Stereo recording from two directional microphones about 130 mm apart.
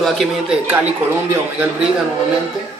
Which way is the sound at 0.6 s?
15° right (ahead or behind).